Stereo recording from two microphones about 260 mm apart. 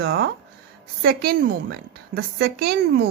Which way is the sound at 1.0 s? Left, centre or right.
Right.